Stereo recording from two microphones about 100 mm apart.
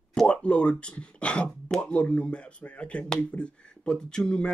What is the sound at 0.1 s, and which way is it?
Speech, 10° left (ahead or behind).